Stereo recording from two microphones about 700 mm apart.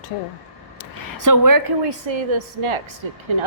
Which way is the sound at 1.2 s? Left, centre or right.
Right.